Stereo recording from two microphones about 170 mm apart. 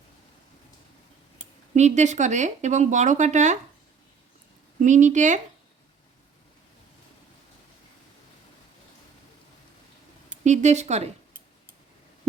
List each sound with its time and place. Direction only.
1.7 s speech: 45° right (ahead or behind)
4.8 s speech: 45° right (ahead or behind)
10.4 s speech: 45° right (ahead or behind)